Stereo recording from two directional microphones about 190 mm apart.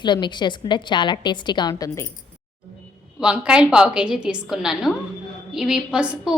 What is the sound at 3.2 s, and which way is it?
A woman's voice, 5° right (ahead or behind).